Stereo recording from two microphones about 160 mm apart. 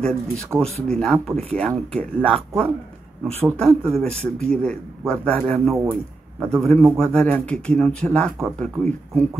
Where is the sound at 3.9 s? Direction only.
5° left (ahead or behind).